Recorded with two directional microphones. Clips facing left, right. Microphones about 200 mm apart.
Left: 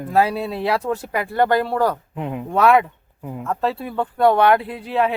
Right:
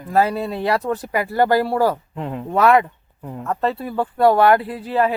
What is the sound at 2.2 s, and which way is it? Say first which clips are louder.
Speech: even; 5° left (ahead or behind).